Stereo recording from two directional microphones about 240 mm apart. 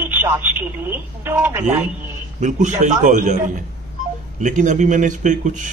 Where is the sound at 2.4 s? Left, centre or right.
Right.